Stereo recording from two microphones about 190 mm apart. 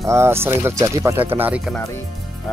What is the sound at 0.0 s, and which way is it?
Speech, 15° right (ahead or behind).